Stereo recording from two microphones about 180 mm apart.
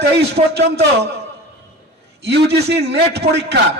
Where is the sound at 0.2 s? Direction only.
65° right (ahead or behind).